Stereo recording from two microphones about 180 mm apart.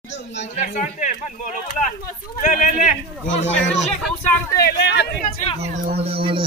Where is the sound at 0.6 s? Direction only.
40° left (ahead or behind).